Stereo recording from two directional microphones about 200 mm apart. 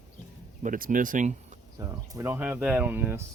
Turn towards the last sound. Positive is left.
turn(degrees=-10)  # may be behind; listen again after turning